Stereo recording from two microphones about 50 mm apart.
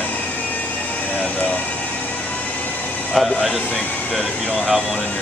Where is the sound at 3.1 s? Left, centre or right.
Centre.